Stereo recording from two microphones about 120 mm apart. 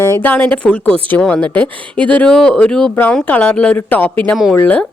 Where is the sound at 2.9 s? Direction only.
15° left (ahead or behind).